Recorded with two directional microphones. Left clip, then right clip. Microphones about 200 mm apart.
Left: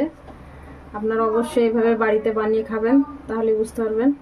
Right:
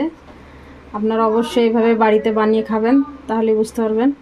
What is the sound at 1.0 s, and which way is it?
Speech, 30° right (ahead or behind).